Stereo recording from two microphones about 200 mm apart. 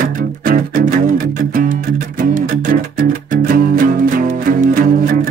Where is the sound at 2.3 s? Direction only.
45° right (ahead or behind).